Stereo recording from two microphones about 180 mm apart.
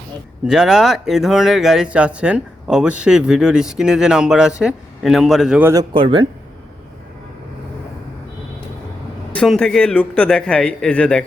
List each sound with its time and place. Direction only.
0.4 s speech: 5° right (ahead or behind)
5.7 s speech: 30° right (ahead or behind)
9.3 s speech: 5° left (ahead or behind)